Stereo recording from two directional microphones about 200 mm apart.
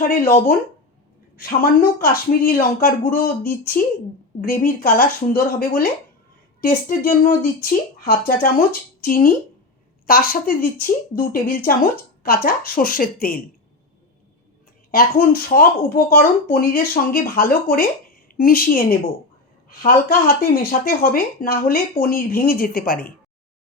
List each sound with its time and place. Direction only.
0.0 s speech: 45° left (ahead or behind)
2.0 s speech: 45° left (ahead or behind)
14.8 s speech: 45° left (ahead or behind)